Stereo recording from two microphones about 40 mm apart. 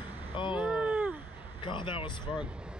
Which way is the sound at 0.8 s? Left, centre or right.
Right.